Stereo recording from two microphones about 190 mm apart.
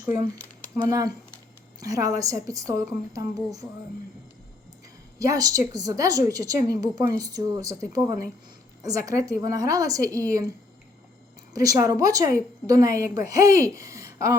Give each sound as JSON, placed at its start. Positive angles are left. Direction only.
{"t": 0.0, "sound": "a woman's voice", "side_deg": -10}
{"t": 5.2, "sound": "a woman's voice", "side_deg": -20}
{"t": 11.5, "sound": "a woman's voice", "side_deg": -20}